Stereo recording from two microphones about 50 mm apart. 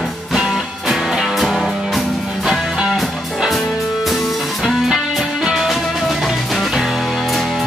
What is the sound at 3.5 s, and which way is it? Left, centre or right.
Music, centre.